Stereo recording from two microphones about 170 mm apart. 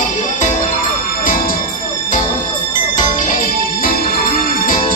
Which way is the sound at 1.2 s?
55° left (ahead or behind).